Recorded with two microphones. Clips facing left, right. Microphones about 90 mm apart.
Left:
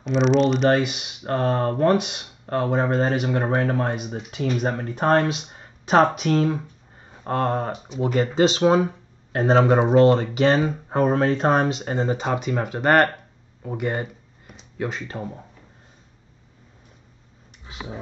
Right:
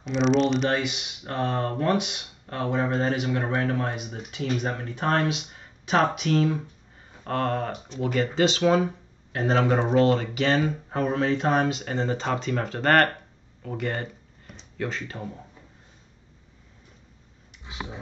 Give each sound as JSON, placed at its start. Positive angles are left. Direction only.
{"t": 0.0, "sound": "speech", "side_deg": 0}
{"t": 0.7, "sound": "speech", "side_deg": 45}
{"t": 7.2, "sound": "speech", "side_deg": 20}
{"t": 12.0, "sound": "speech", "side_deg": 15}
{"t": 15.0, "sound": "speech", "side_deg": 30}